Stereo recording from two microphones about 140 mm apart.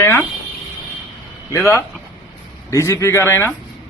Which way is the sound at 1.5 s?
20° left (ahead or behind).